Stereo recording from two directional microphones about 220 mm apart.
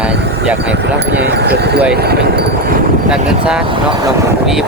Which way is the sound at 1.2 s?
50° right (ahead or behind).